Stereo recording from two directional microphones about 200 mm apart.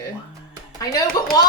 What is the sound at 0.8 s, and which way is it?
Speech, 20° left (ahead or behind).